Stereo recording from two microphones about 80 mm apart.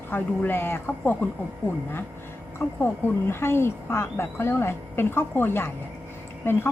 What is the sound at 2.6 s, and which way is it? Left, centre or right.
A woman's voice, left.